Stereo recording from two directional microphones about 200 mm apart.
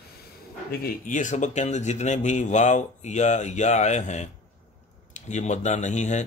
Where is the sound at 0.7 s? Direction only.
40° left (ahead or behind).